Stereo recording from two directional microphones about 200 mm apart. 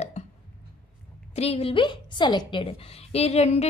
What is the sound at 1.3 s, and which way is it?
A woman's voice, 30° left (ahead or behind).